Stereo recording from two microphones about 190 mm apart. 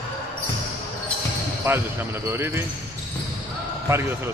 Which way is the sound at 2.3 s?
10° right (ahead or behind).